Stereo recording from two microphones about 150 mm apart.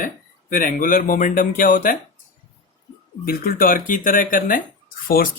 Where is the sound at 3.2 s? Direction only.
75° left (ahead or behind).